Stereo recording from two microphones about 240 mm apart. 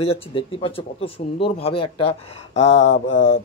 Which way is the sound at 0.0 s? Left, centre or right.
Left.